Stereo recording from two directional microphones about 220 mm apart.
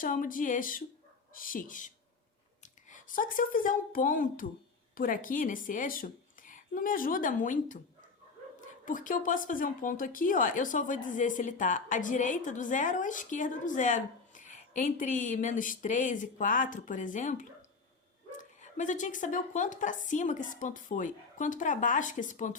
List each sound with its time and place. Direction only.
0.0 s speech: 35° left (ahead or behind)
2.9 s a woman's voice: 40° left (ahead or behind)